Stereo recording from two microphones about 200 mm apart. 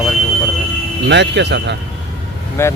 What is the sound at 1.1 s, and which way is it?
Speech, 60° right (ahead or behind).